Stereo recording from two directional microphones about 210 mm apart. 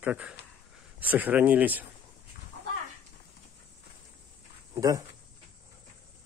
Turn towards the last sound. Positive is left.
turn(degrees=-15)  # may be behind; listen again after turning